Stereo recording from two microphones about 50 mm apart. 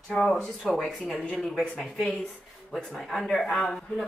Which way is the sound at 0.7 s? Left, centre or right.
Centre.